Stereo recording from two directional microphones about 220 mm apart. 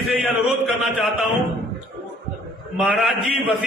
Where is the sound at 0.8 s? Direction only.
Centre (ahead or behind).